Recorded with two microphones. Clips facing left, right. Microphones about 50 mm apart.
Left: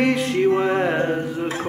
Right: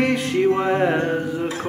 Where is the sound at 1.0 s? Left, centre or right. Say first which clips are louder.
Even; left.